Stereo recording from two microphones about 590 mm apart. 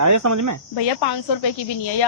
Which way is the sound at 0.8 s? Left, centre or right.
Left.